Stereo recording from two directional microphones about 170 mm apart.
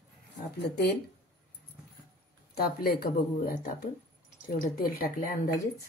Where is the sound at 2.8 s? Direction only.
60° left (ahead or behind).